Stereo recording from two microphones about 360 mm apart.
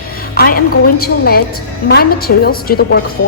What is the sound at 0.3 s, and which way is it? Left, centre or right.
A woman's voice, left.